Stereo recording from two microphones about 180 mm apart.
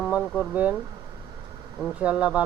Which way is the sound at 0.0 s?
5° right (ahead or behind).